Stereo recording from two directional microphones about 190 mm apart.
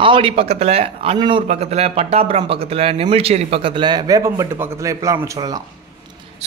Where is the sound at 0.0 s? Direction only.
30° right (ahead or behind).